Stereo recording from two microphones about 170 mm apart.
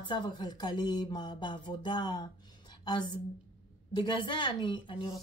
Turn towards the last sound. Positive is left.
turn(degrees=30)  # may be behind; listen again after turning